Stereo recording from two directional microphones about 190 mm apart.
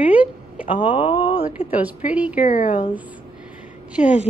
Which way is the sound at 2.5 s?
45° left (ahead or behind).